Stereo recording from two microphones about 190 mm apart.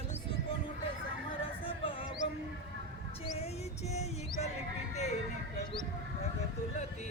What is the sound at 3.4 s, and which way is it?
Music, 35° left (ahead or behind).